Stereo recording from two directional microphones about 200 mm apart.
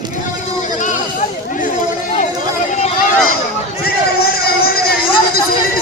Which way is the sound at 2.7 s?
35° left (ahead or behind).